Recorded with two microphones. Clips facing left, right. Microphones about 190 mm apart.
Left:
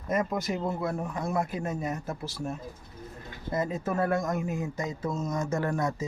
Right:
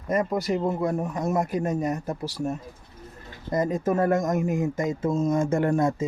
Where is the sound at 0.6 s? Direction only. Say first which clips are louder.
Right 5 dB; 15° right (ahead or behind).